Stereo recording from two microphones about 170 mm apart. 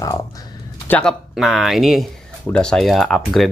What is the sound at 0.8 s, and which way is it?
Speech, 10° left (ahead or behind).